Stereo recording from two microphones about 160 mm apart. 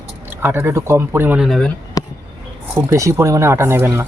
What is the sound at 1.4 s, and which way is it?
Speech, centre (ahead or behind).